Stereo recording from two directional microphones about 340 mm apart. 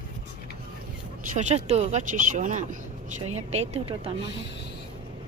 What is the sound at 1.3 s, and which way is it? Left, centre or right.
Speech, centre.